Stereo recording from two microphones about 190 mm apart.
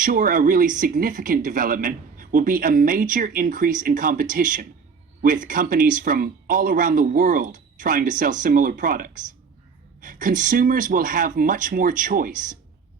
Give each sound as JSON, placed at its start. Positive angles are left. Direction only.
{"t": 0.0, "sound": "speech", "side_deg": -45}